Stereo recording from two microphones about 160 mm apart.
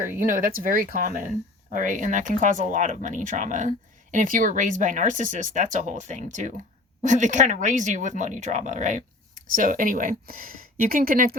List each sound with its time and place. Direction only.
0.2 s speech: 60° right (ahead or behind)